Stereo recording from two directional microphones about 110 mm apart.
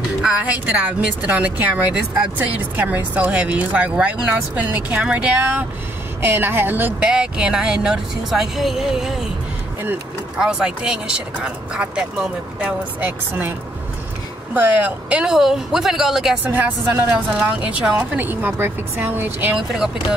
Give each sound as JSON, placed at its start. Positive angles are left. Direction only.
{"t": 0.2, "sound": "speech", "side_deg": -10}
{"t": 10.4, "sound": "speech", "side_deg": -10}
{"t": 16.4, "sound": "speech", "side_deg": -15}
{"t": 19.5, "sound": "speech", "side_deg": -5}